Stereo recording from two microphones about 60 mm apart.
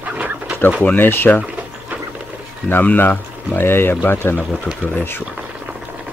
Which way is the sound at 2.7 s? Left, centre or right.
Left.